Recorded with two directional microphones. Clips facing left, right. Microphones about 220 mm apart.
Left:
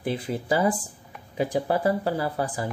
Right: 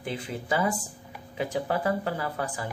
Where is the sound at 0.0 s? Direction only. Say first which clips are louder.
Left 5 dB; 35° left (ahead or behind).